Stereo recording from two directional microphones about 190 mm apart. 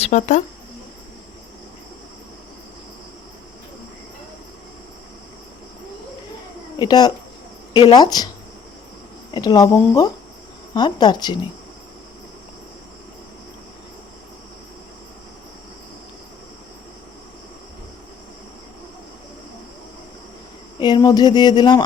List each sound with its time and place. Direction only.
0.0 s speech: 40° left (ahead or behind)
6.7 s speech: 20° left (ahead or behind)
9.3 s speech: 20° left (ahead or behind)
20.7 s speech: 25° left (ahead or behind)